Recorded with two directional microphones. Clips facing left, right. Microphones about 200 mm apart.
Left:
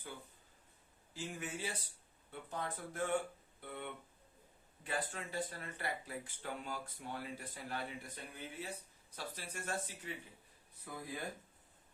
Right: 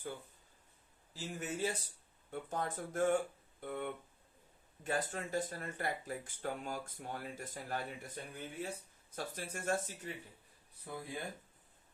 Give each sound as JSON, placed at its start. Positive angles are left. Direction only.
{"t": 1.1, "sound": "speech", "side_deg": -40}
{"t": 10.9, "sound": "speech", "side_deg": -30}